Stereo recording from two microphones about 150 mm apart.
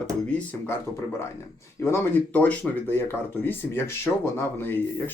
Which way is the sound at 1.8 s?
15° left (ahead or behind).